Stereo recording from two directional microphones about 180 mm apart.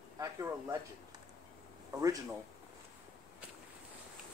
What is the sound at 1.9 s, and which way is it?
Speech, 20° right (ahead or behind).